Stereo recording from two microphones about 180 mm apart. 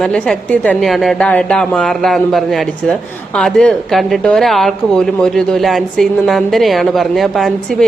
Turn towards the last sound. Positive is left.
turn(degrees=0)  # may be behind; listen again after turning